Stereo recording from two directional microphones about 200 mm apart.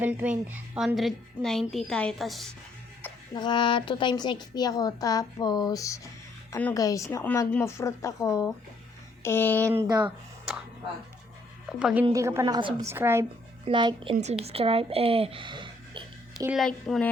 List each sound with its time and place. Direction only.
0.0 s a woman's voice: 5° right (ahead or behind)
3.3 s a woman's voice: 20° left (ahead or behind)
11.8 s a woman's voice: 5° right (ahead or behind)
13.7 s a woman's voice: 25° right (ahead or behind)
16.5 s a woman's voice: centre (ahead or behind)